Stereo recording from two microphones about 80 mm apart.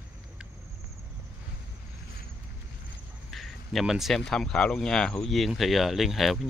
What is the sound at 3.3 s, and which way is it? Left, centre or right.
Speech, centre.